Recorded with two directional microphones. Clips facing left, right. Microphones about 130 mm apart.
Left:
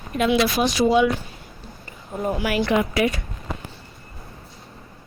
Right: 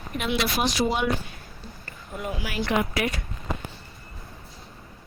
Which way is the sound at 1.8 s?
30° left (ahead or behind).